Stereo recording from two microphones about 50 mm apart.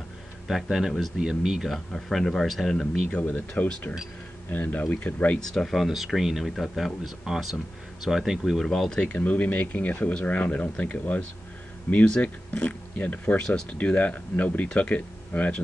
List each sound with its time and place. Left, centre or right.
0.5 s speech: centre
1.9 s speech: centre
2.7 s speech: centre
3.3 s speech: left
5.4 s speech: centre
8.7 s speech: centre
9.0 s speech: left